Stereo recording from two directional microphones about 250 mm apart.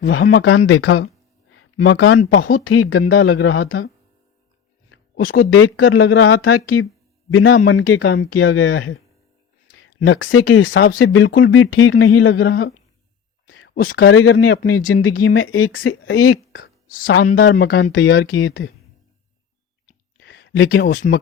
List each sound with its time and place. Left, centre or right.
0.0 s speech: left
1.0 s a sound: left
2.3 s speech: left
2.6 s speech: left
5.2 s speech: left
5.5 s speech: left
17.1 s speech: left
20.1 s a sound: left
20.8 s speech: left